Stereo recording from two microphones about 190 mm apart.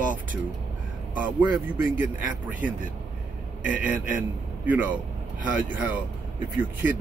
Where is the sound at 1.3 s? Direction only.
10° right (ahead or behind).